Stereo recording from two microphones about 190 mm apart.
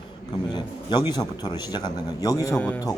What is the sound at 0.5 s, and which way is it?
A man's voice, 25° left (ahead or behind).